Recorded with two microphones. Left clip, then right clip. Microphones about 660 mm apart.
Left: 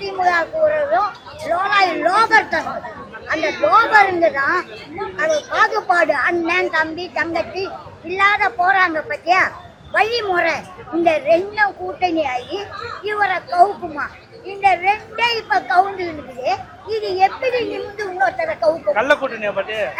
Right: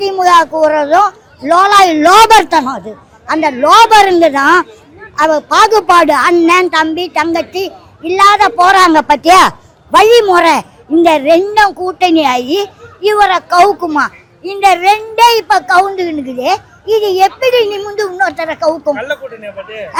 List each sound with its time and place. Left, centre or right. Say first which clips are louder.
0.0 s a woman's voice: right 10 dB; right
14.6 s a woman's voice: right 8 dB; right
18.9 s speech: left 3 dB; centre